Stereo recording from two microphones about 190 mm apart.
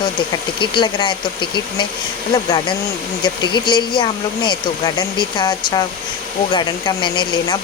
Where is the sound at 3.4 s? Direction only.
25° left (ahead or behind).